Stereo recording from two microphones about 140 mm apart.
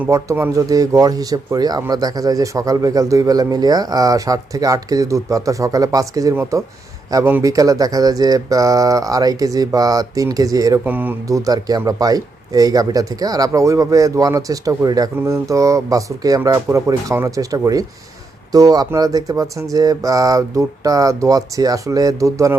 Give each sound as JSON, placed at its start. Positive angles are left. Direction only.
{"t": 0.0, "sound": "speech", "side_deg": -20}
{"t": 10.8, "sound": "speech", "side_deg": -15}